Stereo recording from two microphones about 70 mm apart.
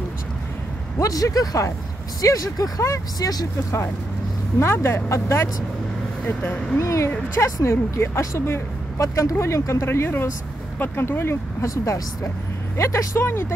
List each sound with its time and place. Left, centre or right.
0.9 s speech: left
4.6 s speech: left
6.2 s speech: left
6.8 s speech: left
9.0 s speech: left
9.8 s speech: left
11.6 s speech: left